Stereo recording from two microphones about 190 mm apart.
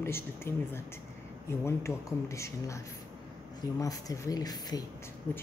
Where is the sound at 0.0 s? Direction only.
10° left (ahead or behind).